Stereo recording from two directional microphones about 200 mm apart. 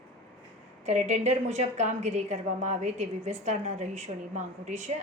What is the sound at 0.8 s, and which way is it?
A woman's voice, 35° right (ahead or behind).